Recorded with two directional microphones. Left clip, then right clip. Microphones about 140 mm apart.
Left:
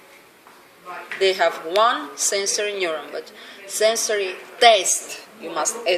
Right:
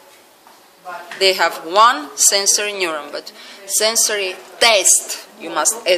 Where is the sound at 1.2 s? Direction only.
50° right (ahead or behind).